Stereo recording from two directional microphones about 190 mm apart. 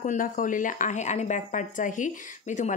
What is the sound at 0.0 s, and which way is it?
Speech, 45° left (ahead or behind).